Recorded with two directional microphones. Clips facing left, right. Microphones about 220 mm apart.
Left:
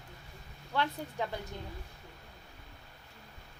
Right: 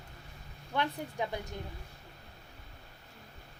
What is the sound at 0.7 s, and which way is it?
Speech, 15° right (ahead or behind).